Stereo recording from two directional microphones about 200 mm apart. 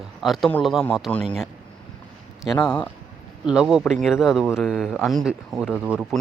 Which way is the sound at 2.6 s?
5° left (ahead or behind).